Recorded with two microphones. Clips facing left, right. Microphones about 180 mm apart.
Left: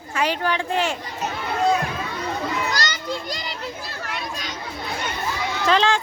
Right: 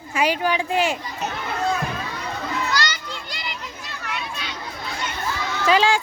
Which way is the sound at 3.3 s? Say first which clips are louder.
Left 4 dB; 40° left (ahead or behind).